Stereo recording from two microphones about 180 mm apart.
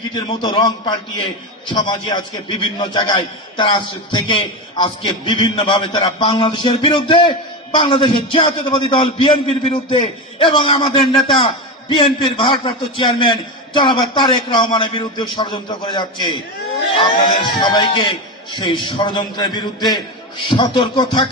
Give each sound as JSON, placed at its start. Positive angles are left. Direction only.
{"t": 0.1, "sound": "a man's voice", "side_deg": 25}